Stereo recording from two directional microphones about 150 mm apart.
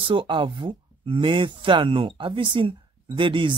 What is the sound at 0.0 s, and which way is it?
Speech, 35° right (ahead or behind).